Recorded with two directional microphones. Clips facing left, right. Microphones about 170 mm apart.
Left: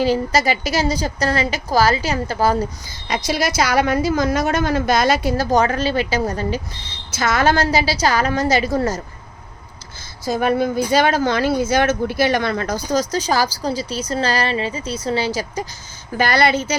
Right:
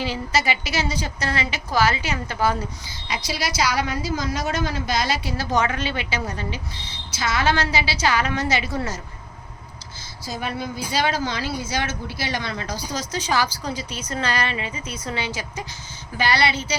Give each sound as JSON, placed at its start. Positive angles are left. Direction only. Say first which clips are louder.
{"t": 0.0, "sound": "speech", "louder": "left 7 dB", "side_deg": 40}
{"t": 3.1, "sound": "a woman's voice", "louder": "left 7 dB", "side_deg": 45}
{"t": 10.2, "sound": "a woman's voice", "louder": "left 11 dB", "side_deg": 50}
{"t": 16.1, "sound": "a woman's voice", "louder": "left 5 dB", "side_deg": 45}